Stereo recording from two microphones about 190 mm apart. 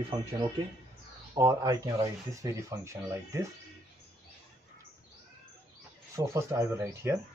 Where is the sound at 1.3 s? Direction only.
20° right (ahead or behind).